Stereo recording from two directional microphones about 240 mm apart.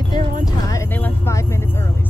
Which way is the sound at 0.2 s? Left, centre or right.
Right.